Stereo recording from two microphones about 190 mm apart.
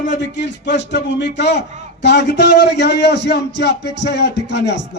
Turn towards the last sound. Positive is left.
turn(degrees=65)  # may be behind; listen again after turning